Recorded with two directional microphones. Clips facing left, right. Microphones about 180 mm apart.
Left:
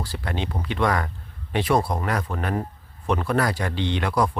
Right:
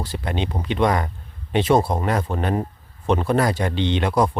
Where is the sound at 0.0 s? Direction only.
20° right (ahead or behind).